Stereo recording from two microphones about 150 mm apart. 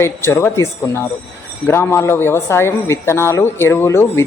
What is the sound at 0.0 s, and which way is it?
A man's voice, 15° left (ahead or behind).